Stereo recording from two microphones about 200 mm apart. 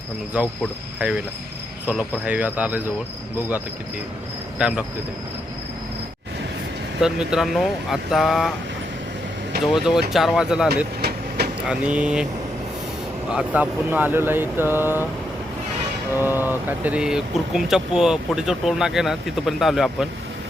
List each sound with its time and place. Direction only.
0.4 s speech: 5° right (ahead or behind)
4.5 s speech: 5° right (ahead or behind)
7.0 s speech: 5° right (ahead or behind)
9.6 s speech: centre (ahead or behind)
11.0 s vehicle: 55° right (ahead or behind)
11.7 s speech: 5° right (ahead or behind)
13.3 s speech: 10° right (ahead or behind)
16.1 s speech: 10° right (ahead or behind)